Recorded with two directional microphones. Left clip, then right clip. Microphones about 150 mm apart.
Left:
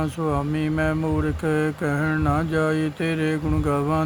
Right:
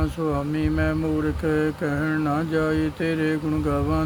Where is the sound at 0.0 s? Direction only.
40° left (ahead or behind).